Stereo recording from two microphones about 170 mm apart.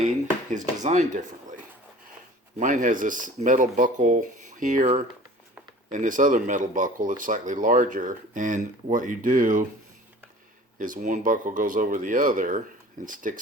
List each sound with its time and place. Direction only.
0.8 s speech: 45° right (ahead or behind)
10.8 s speech: 50° right (ahead or behind)